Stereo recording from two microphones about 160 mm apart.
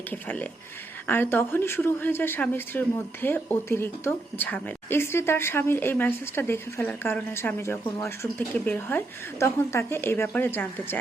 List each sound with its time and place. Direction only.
0.1 s a woman's voice: 10° left (ahead or behind)